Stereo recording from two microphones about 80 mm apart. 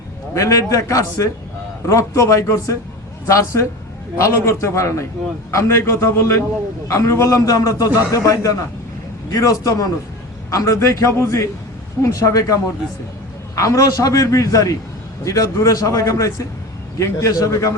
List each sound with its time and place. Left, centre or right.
0.3 s a man's voice: left
13.6 s a man's voice: left